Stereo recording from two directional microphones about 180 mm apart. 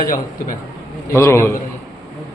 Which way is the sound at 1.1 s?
15° left (ahead or behind).